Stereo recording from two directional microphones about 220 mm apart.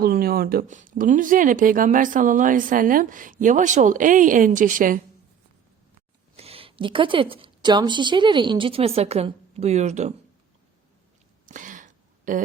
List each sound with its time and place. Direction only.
0.0 s speech: 40° right (ahead or behind)
6.3 s a woman's voice: 25° right (ahead or behind)
11.4 s a sound: 35° right (ahead or behind)